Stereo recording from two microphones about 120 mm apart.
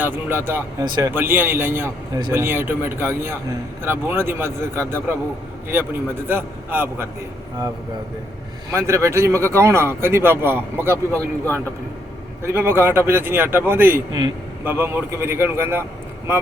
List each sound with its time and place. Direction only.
0.0 s a man's voice: 15° right (ahead or behind)
0.9 s speech: 35° right (ahead or behind)
1.1 s a man's voice: 15° right (ahead or behind)
8.7 s speech: 25° right (ahead or behind)
11.1 s speech: 15° left (ahead or behind)
12.4 s speech: 20° right (ahead or behind)